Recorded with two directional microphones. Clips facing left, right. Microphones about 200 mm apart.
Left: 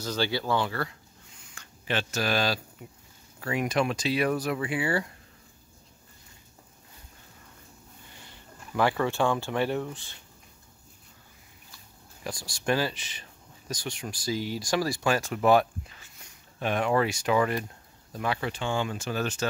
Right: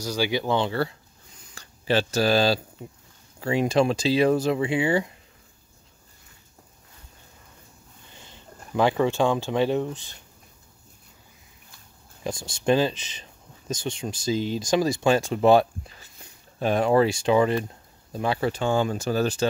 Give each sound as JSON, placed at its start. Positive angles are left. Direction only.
{"t": 0.0, "sound": "speech", "side_deg": -10}
{"t": 1.4, "sound": "a sound", "side_deg": -35}
{"t": 3.3, "sound": "speech", "side_deg": -25}
{"t": 8.1, "sound": "sniff", "side_deg": -20}
{"t": 8.7, "sound": "speech", "side_deg": -20}
{"t": 12.2, "sound": "speech", "side_deg": -25}